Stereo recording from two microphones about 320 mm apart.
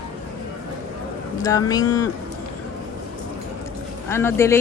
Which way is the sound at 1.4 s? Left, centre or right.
Centre.